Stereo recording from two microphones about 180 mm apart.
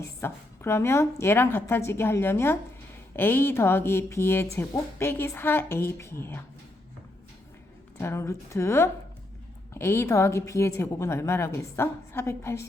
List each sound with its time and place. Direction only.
0.2 s a woman's voice: 15° left (ahead or behind)
7.9 s a woman's voice: 15° left (ahead or behind)